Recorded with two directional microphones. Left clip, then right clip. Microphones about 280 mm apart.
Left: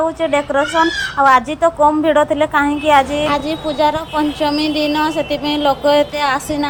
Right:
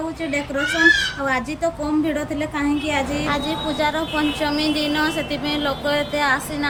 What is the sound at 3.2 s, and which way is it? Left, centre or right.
Speech, left.